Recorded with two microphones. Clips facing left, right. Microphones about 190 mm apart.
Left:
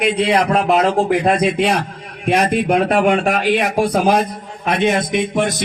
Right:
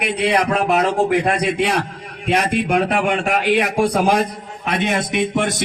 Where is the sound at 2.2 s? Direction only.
50° left (ahead or behind).